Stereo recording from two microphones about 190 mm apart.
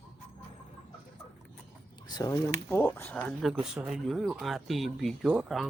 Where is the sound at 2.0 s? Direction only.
20° left (ahead or behind).